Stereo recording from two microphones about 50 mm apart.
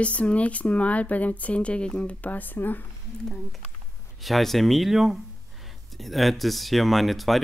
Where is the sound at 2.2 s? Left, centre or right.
Left.